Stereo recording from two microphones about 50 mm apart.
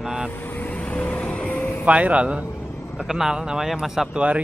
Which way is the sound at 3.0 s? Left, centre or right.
Centre.